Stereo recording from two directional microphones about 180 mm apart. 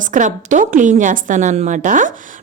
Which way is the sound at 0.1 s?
45° right (ahead or behind).